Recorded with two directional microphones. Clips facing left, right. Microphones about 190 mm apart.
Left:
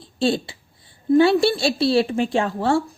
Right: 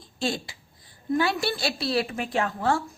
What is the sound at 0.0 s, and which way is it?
A woman's voice, 30° left (ahead or behind).